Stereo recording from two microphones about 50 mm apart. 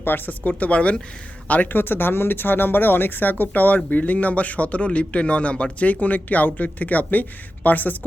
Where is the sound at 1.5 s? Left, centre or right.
Left.